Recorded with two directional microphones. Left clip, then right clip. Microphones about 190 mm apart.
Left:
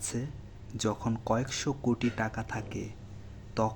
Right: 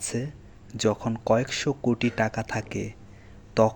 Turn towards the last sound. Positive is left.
turn(degrees=-20)  # may be behind; listen again after turning